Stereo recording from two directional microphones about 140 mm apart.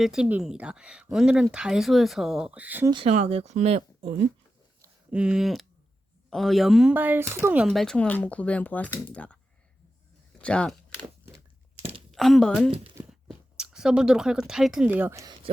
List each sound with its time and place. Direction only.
0.0 s speech: 5° right (ahead or behind)
2.9 s speech: 45° right (ahead or behind)
5.1 s speech: 5° right (ahead or behind)
6.9 s speech: 15° right (ahead or behind)
7.6 s speech: centre (ahead or behind)
10.3 s a sound: 10° left (ahead or behind)
11.8 s a sound: 45° right (ahead or behind)
12.1 s speech: centre (ahead or behind)
15.1 s speech: 25° right (ahead or behind)